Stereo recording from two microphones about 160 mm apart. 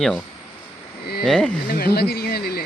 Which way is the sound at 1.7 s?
75° left (ahead or behind).